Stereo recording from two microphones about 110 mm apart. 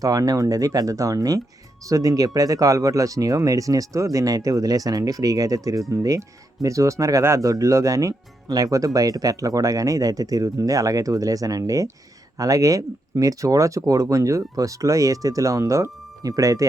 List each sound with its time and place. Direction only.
0.0 s speech: 30° right (ahead or behind)